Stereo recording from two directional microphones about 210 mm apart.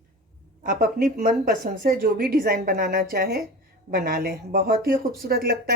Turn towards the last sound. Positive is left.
turn(degrees=-45)  # may be behind; listen again after turning